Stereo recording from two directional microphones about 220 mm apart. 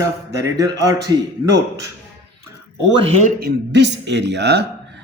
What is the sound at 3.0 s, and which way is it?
Speech, 30° right (ahead or behind).